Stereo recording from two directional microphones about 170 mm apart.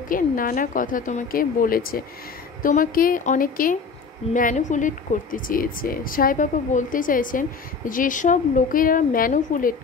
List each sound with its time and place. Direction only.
0.1 s a woman's voice: 55° left (ahead or behind)